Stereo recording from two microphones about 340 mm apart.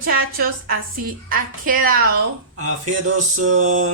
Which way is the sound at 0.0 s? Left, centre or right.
Right.